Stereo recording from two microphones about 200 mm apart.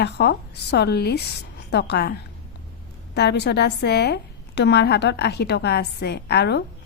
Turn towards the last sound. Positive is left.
turn(degrees=55)  # may be behind; listen again after turning